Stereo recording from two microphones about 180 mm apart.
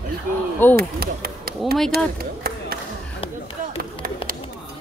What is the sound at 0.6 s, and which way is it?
Speech, 10° left (ahead or behind).